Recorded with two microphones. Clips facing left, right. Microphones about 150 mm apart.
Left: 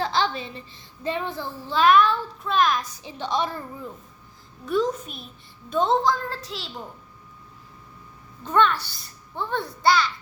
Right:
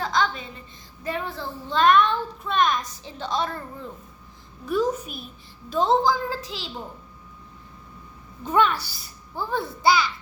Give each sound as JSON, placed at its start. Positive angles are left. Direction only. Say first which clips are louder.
{"t": 0.0, "sound": "a sound", "louder": "even", "side_deg": 30}
{"t": 1.0, "sound": "speech", "louder": "left 2 dB", "side_deg": 20}
{"t": 1.7, "sound": "a child's voice", "louder": "left 1 dB", "side_deg": 5}
{"t": 3.0, "sound": "a woman's voice", "louder": "left 1 dB", "side_deg": 15}
{"t": 4.6, "sound": "a child's voice", "louder": "even", "side_deg": -5}
{"t": 8.4, "sound": "a child's voice", "louder": "even", "side_deg": -10}